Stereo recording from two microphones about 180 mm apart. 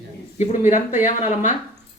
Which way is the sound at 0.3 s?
45° left (ahead or behind).